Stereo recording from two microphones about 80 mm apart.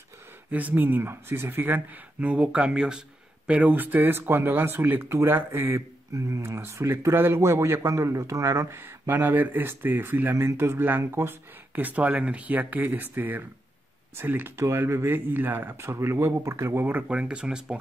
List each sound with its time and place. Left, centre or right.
0.5 s speech: centre
2.1 s speech: centre; by 5.8 s right
5.8 s speech: right; by 17.7 s centre